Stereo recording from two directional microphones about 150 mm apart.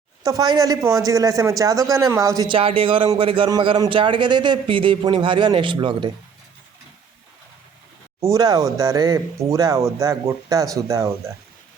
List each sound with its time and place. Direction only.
0.2 s speech: 25° right (ahead or behind)
2.6 s a man's voice: 35° right (ahead or behind)
8.2 s speech: 25° right (ahead or behind)